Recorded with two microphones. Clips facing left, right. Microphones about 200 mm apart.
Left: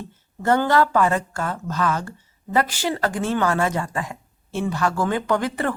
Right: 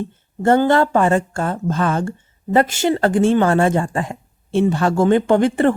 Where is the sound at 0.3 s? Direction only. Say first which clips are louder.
Right 4 dB; 25° right (ahead or behind).